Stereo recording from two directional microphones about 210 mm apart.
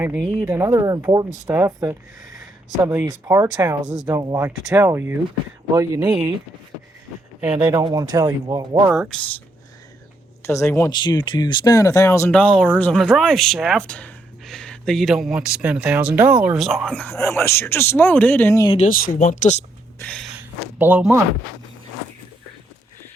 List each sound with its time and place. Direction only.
0.0 s speech: 5° right (ahead or behind)
7.4 s speech: 10° right (ahead or behind)
8.9 s speech: centre (ahead or behind)
10.4 s speech: 15° left (ahead or behind)
18.8 s speech: 40° left (ahead or behind)
20.0 s snort: 5° left (ahead or behind)
20.7 s speech: 10° right (ahead or behind)